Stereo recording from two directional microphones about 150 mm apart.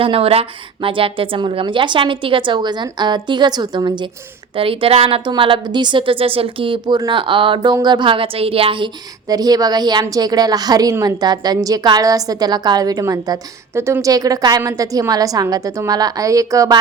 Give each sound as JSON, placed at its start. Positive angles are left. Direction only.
{"t": 0.0, "sound": "a woman's voice", "side_deg": -40}